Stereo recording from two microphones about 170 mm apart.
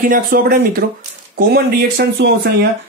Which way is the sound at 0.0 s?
60° right (ahead or behind).